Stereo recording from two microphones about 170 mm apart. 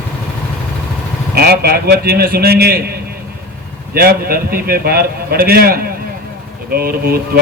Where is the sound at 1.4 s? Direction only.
65° right (ahead or behind).